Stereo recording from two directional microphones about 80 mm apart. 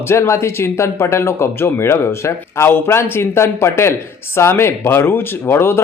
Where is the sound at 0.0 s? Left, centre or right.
Left.